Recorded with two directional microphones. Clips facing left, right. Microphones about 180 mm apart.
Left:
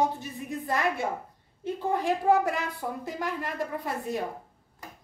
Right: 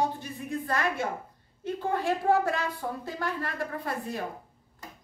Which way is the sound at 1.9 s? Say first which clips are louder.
Left 2 dB; 15° left (ahead or behind).